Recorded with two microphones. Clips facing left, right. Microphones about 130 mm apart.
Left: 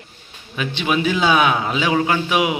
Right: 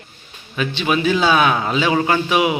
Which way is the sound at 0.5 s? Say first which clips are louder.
Right 1 dB; 10° left (ahead or behind).